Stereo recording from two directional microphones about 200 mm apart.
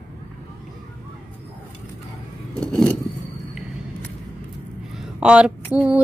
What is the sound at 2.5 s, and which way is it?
Vehicle, 15° right (ahead or behind).